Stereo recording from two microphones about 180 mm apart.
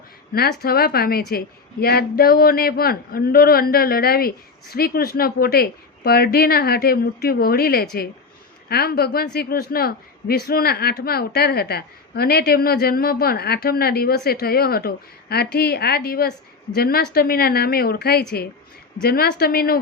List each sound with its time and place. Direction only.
0.6 s speech: 55° left (ahead or behind)